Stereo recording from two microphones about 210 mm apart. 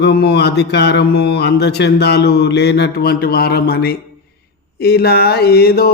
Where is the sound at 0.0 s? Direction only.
50° left (ahead or behind).